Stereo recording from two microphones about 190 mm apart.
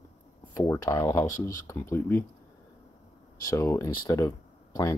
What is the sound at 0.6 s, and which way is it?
Speech, 15° left (ahead or behind).